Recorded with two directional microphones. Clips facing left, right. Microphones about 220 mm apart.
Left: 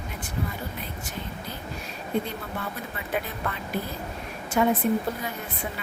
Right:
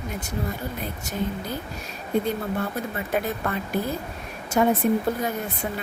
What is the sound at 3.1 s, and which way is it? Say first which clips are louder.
Speech: right 4 dB; 45° right (ahead or behind).